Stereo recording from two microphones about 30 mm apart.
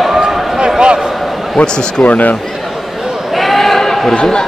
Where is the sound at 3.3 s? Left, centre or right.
Centre.